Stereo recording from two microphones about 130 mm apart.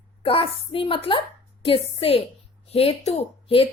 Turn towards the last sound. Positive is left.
turn(degrees=45)  # may be behind; listen again after turning